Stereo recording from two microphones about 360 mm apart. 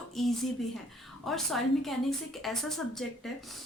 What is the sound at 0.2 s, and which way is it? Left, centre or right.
Speech, centre.